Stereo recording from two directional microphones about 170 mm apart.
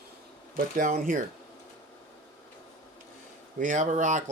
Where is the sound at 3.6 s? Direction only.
50° right (ahead or behind).